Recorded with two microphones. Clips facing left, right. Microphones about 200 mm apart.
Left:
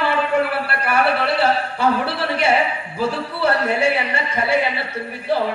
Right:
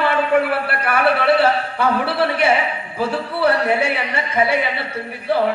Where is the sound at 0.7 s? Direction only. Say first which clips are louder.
Right 1 dB; 55° right (ahead or behind).